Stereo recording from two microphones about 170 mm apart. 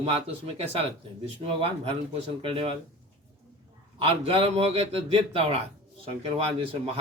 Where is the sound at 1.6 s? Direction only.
35° right (ahead or behind).